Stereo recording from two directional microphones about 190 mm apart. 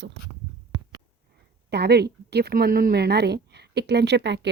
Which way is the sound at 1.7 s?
60° right (ahead or behind).